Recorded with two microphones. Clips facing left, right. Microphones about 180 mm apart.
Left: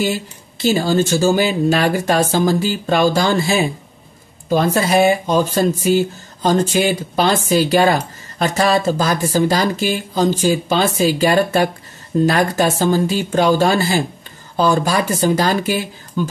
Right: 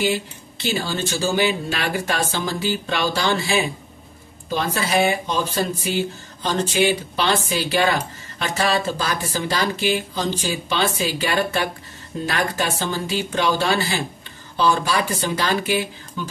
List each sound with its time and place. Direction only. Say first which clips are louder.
0.0 s speech: left 2 dB; 40° left (ahead or behind)